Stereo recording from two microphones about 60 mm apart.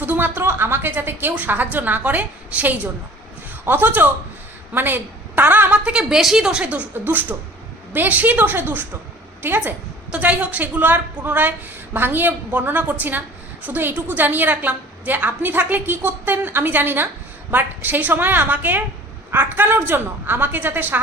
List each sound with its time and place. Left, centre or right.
0.0 s a woman's voice: right
5.7 s a woman's voice: centre
6.7 s a woman's voice: right
10.1 s a woman's voice: right